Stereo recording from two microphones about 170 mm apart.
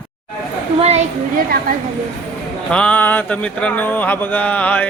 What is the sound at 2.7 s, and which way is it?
Speech, 10° left (ahead or behind).